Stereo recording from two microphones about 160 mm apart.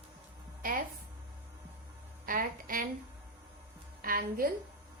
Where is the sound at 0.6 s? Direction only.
60° right (ahead or behind).